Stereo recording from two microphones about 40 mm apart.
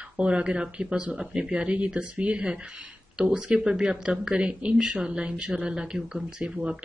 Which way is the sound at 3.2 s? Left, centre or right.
Centre.